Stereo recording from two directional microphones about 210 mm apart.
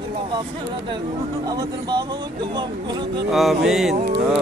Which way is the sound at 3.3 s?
Centre (ahead or behind).